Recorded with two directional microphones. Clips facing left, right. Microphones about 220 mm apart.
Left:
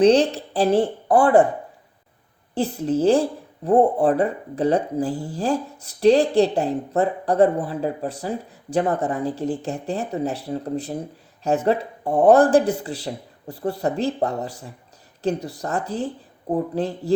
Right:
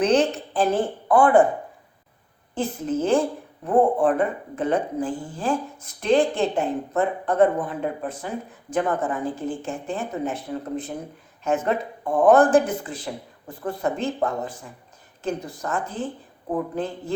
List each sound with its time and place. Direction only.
0.0 s a woman's voice: 35° left (ahead or behind)
2.6 s speech: 35° left (ahead or behind)